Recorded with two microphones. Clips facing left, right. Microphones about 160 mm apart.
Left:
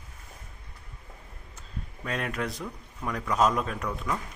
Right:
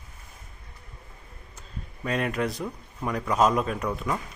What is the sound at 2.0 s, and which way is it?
Speech, 5° right (ahead or behind).